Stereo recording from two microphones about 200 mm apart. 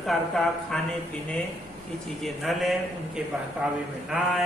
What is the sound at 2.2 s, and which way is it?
Speech, centre (ahead or behind).